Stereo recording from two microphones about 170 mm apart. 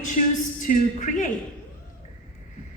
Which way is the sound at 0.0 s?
50° left (ahead or behind).